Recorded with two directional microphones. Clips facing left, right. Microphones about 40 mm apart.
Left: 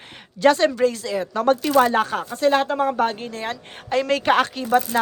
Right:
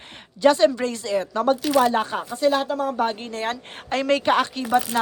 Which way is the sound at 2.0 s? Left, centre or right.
Centre.